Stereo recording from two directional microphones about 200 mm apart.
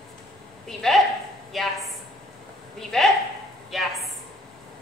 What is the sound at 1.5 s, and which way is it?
Speech, centre (ahead or behind).